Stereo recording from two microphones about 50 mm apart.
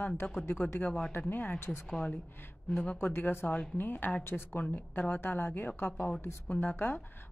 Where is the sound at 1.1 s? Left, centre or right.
Left.